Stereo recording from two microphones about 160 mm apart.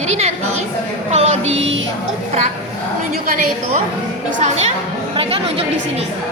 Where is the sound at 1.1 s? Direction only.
40° right (ahead or behind).